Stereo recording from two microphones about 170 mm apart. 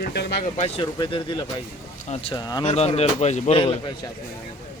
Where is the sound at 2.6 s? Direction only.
40° left (ahead or behind).